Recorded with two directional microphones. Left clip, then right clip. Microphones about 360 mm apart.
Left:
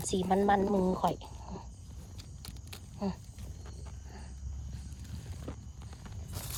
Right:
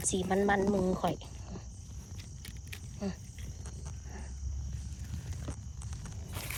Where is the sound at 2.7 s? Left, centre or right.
Centre.